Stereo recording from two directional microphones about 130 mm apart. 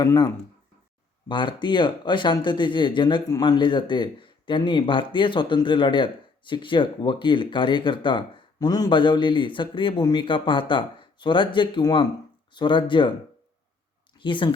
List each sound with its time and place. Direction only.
0.0 s speech: 25° left (ahead or behind)
1.3 s speech: 40° left (ahead or behind)
14.2 s speech: 40° left (ahead or behind)